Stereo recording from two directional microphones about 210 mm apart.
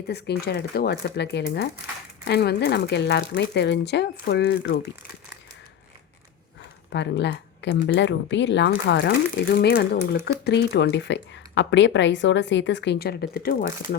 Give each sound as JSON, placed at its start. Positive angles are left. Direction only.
{"t": 0.1, "sound": "speech", "side_deg": 50}
{"t": 6.9, "sound": "speech", "side_deg": 55}